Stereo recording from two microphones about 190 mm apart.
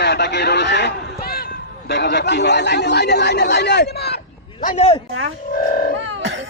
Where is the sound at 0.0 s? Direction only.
65° left (ahead or behind).